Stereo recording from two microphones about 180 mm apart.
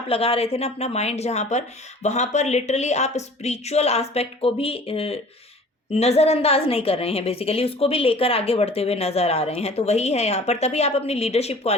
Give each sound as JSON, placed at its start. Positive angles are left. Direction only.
{"t": 0.1, "sound": "a woman's voice", "side_deg": 35}